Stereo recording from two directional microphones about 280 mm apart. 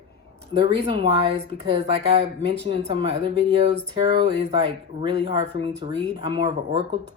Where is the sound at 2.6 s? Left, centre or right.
Right.